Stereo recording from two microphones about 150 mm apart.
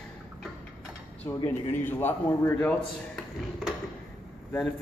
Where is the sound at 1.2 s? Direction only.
20° left (ahead or behind).